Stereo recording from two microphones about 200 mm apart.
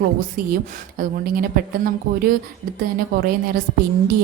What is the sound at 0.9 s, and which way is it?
Speech, 45° right (ahead or behind).